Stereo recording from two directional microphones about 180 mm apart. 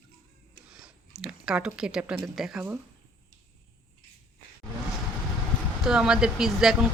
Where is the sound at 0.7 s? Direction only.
5° right (ahead or behind).